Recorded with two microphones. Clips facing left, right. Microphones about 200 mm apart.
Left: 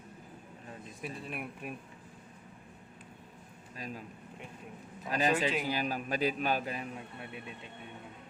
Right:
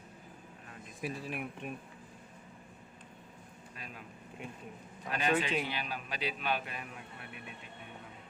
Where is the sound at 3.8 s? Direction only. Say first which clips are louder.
Left 7 dB; 35° left (ahead or behind).